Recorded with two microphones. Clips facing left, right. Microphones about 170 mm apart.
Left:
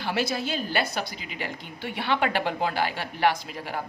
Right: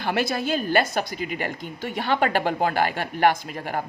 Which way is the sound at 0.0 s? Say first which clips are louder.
Right 3 dB; 55° right (ahead or behind).